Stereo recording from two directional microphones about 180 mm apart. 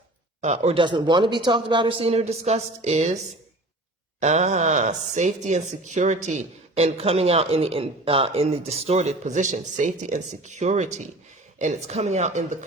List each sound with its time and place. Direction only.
0.4 s speech: 40° right (ahead or behind)
4.2 s speech: 40° right (ahead or behind)